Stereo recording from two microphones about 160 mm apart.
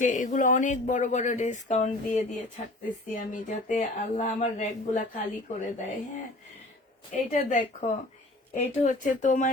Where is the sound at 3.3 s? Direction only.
50° left (ahead or behind).